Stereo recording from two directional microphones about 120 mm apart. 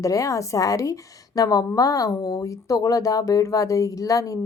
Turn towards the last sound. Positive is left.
turn(degrees=30)  # may be behind; listen again after turning